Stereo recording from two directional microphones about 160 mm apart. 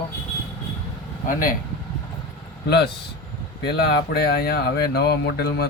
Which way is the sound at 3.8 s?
90° left.